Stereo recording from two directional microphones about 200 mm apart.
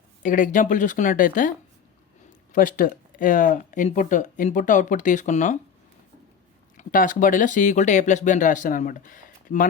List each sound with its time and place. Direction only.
0.2 s speech: 40° left (ahead or behind)
6.7 s speech: 40° left (ahead or behind)